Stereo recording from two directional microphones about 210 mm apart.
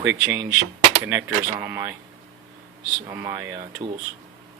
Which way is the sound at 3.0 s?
10° right (ahead or behind).